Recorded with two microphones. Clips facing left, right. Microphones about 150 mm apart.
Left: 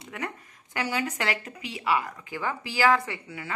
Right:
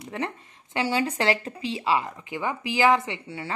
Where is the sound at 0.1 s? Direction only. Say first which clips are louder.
Right 4 dB; 30° right (ahead or behind).